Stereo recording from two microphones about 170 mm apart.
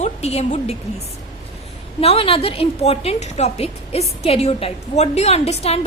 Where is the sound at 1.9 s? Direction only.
35° left (ahead or behind).